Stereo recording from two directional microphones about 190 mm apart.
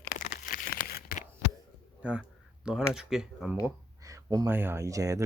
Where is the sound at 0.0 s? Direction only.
50° left (ahead or behind).